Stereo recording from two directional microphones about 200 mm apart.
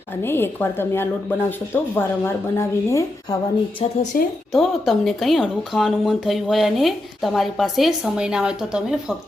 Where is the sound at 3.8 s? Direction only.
30° left (ahead or behind).